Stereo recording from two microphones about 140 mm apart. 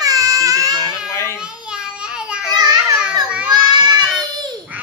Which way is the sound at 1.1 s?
20° left (ahead or behind).